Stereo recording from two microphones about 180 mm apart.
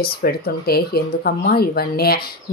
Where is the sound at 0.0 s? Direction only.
60° left (ahead or behind).